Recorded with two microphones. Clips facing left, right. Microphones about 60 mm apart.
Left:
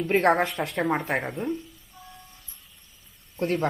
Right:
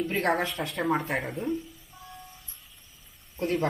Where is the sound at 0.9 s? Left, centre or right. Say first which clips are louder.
Even; left.